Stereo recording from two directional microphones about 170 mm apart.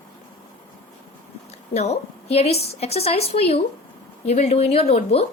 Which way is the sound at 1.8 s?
40° left (ahead or behind).